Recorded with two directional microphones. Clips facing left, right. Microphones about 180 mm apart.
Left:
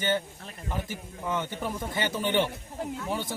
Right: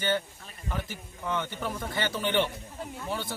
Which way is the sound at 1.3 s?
10° left (ahead or behind).